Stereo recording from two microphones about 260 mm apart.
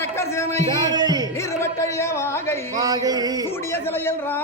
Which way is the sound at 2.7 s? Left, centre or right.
Centre.